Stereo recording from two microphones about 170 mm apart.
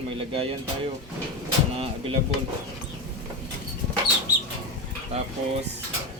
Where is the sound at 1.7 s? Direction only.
35° right (ahead or behind).